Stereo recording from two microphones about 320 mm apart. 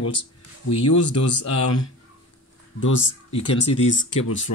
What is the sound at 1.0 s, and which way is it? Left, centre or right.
Speech, left.